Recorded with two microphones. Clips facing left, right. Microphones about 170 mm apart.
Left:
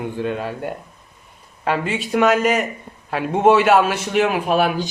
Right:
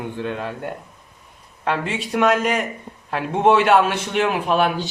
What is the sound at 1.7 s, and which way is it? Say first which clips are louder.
A man's voice: left 2 dB; 5° left (ahead or behind).